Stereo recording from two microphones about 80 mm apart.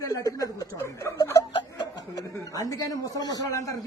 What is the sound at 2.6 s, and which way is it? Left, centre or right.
Speech, left.